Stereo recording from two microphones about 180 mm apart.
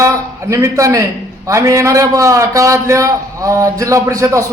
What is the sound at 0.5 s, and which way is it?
A man's voice, 15° right (ahead or behind).